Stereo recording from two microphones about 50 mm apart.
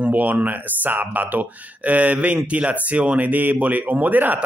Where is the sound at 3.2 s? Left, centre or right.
Right.